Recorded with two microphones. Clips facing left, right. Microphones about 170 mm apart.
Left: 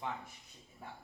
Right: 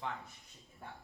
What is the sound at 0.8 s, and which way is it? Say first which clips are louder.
Speech: even; 5° left (ahead or behind).